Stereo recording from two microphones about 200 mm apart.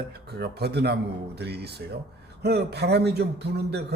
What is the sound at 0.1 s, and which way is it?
A man's voice, 55° right (ahead or behind).